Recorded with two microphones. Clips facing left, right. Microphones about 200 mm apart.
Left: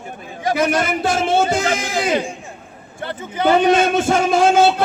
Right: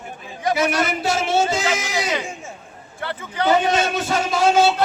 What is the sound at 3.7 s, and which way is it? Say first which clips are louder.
A man's voice: left 6 dB; 50° left (ahead or behind).